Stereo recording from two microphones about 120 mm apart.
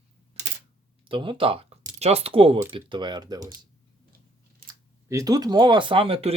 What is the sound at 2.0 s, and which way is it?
Speech, 60° right (ahead or behind).